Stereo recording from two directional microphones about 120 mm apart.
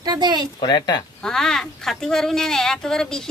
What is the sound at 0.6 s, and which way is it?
Speech, 35° left (ahead or behind).